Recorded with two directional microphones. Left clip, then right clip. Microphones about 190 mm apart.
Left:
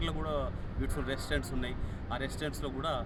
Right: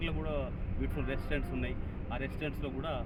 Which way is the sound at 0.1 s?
10° left (ahead or behind).